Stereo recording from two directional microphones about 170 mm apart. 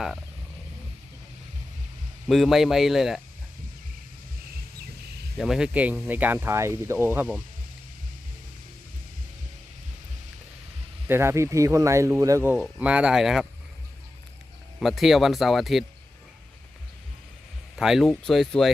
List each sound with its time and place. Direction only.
2.2 s speech: centre (ahead or behind)
5.4 s speech: 5° right (ahead or behind)
11.1 s speech: 15° right (ahead or behind)
14.8 s speech: centre (ahead or behind)
17.7 s speech: 5° right (ahead or behind)